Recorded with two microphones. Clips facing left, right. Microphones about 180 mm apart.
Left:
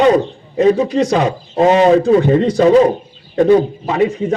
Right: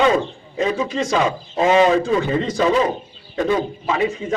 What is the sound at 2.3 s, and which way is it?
Speech, 60° left (ahead or behind).